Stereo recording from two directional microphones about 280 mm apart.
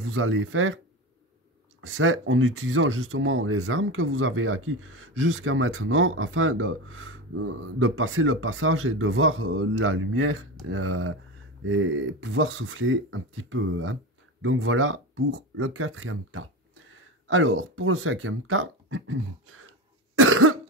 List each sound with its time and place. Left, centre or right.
0.1 s speech: right
1.8 s speech: right
20.2 s cough: right